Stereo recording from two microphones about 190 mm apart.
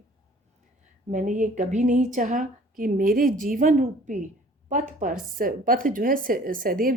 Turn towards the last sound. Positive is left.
turn(degrees=-45)  # may be behind; listen again after turning